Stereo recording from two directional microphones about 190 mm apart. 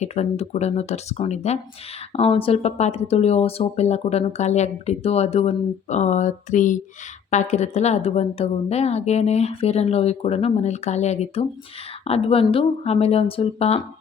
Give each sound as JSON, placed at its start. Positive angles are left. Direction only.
{"t": 0.0, "sound": "speech", "side_deg": 35}